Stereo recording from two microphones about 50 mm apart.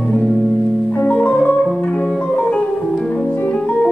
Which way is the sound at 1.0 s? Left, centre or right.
Left.